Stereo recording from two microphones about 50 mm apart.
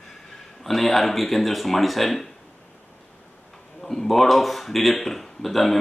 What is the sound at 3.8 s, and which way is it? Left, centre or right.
Speech, centre.